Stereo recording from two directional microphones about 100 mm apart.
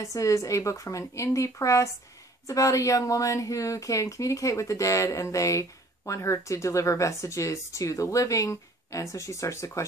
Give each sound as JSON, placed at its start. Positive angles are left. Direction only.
{"t": 0.0, "sound": "a woman's voice", "side_deg": 35}